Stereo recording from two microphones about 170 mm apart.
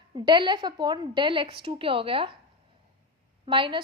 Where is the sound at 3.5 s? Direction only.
30° right (ahead or behind).